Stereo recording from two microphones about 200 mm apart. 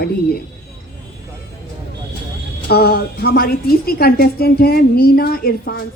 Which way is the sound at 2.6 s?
55° left (ahead or behind).